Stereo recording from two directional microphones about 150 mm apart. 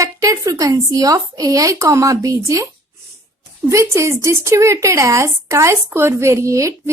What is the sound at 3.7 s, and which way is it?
A woman's voice, 20° right (ahead or behind).